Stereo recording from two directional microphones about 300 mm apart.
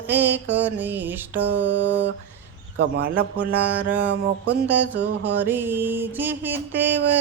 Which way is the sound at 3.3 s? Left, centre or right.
Centre.